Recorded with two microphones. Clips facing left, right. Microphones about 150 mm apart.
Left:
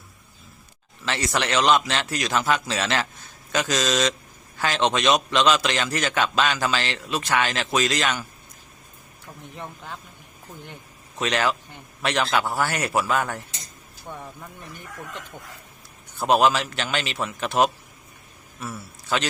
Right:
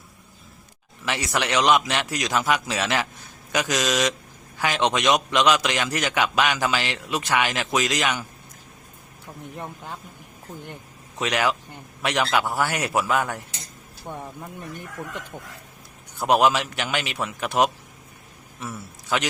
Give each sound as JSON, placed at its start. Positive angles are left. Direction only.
{"t": 1.0, "sound": "a man's voice", "side_deg": -15}
{"t": 11.2, "sound": "a man's voice", "side_deg": -10}
{"t": 16.2, "sound": "a man's voice", "side_deg": -15}
{"t": 19.0, "sound": "a man's voice", "side_deg": -15}